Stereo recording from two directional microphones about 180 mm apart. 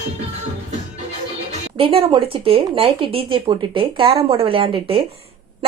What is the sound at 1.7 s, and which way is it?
Speech, 30° right (ahead or behind).